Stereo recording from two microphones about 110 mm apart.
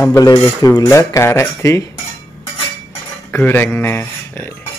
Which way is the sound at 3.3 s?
15° left (ahead or behind).